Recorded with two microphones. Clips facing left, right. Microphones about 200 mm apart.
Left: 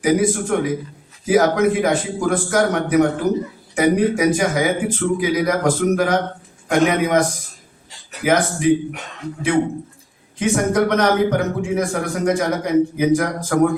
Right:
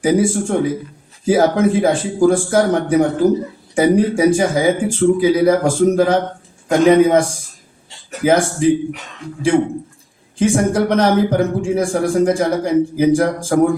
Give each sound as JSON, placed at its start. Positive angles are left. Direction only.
{"t": 0.0, "sound": "a man's voice", "side_deg": -30}
{"t": 10.3, "sound": "a man's voice", "side_deg": -30}